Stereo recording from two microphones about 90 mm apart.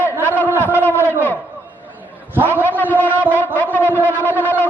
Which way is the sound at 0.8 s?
25° left (ahead or behind).